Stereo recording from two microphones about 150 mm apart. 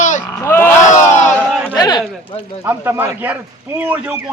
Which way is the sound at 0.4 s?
10° left (ahead or behind).